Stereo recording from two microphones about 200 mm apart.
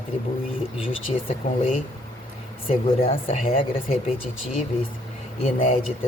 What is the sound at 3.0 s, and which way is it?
Speech, 30° left (ahead or behind).